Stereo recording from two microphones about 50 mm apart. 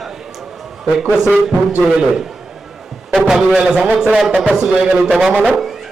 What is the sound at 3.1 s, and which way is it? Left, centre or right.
Speech, centre.